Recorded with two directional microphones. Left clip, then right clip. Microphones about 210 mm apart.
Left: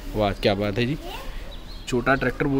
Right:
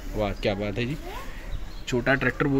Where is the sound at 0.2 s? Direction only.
25° left (ahead or behind).